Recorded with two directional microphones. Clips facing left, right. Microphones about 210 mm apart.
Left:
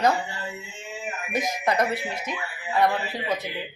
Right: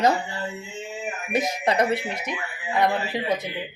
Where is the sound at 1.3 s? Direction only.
25° right (ahead or behind).